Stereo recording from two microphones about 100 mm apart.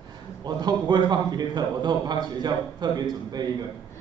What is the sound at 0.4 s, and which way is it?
A man's voice, 45° right (ahead or behind).